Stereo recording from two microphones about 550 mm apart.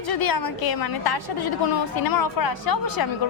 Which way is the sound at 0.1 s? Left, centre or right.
Left.